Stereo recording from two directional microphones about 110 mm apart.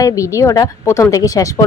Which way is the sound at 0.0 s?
30° left (ahead or behind).